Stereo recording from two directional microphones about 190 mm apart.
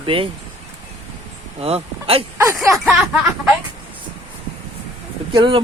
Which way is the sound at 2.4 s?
15° right (ahead or behind).